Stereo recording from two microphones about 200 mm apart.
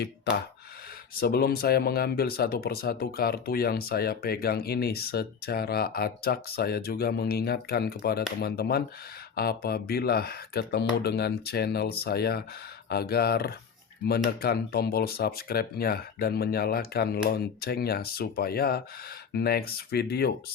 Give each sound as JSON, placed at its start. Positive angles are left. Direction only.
{"t": 1.2, "sound": "speech", "side_deg": 50}